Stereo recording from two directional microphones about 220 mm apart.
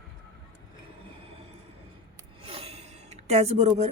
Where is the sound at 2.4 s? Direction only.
25° right (ahead or behind).